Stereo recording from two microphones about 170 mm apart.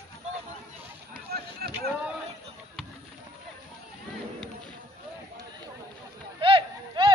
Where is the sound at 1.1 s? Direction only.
65° right (ahead or behind).